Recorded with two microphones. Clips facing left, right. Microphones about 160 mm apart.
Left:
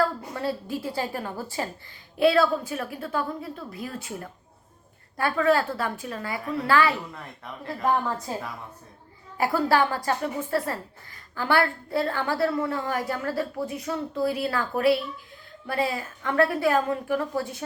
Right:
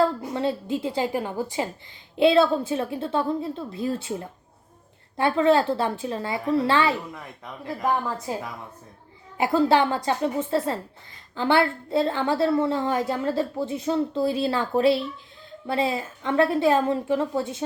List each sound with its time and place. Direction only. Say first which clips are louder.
0.0 s a woman's voice: right 4 dB; 20° right (ahead or behind)
8.3 s a woman's voice: right 2 dB; 15° right (ahead or behind)